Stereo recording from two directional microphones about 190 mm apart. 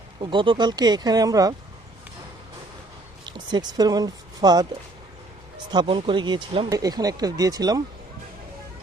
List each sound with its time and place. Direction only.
0.2 s speech: 25° right (ahead or behind)
3.2 s speech: 25° right (ahead or behind)
5.7 s speech: 25° right (ahead or behind)